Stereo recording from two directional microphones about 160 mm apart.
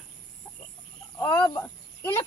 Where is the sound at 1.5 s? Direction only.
15° left (ahead or behind).